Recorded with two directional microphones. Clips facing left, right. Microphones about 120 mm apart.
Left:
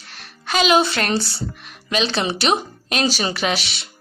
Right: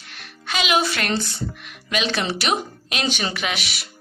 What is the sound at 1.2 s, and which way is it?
A woman's voice, 35° left (ahead or behind).